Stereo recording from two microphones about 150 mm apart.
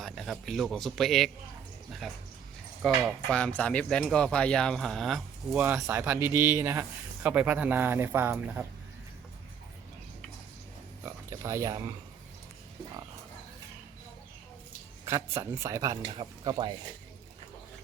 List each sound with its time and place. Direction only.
0.0 s speech: centre (ahead or behind)
3.2 s speech: 5° left (ahead or behind)
5.5 s speech: 15° right (ahead or behind)
11.0 s a sound: 20° right (ahead or behind)
15.0 s speech: 20° right (ahead or behind)